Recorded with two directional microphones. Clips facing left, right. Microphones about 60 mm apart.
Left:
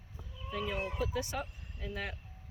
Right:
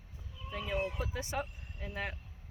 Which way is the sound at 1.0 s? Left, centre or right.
Right.